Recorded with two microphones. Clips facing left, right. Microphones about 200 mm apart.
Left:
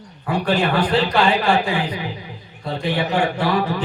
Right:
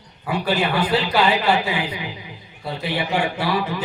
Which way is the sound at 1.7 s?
20° right (ahead or behind).